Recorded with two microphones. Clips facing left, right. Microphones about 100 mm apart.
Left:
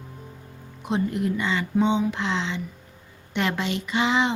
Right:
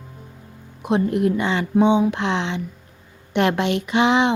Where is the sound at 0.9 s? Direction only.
60° right (ahead or behind).